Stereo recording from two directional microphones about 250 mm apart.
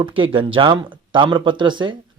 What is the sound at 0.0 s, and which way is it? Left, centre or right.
Speech, right.